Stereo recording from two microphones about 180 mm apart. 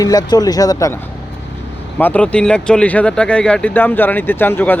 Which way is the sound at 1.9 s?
10° left (ahead or behind).